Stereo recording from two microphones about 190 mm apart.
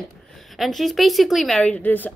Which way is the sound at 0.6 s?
Centre (ahead or behind).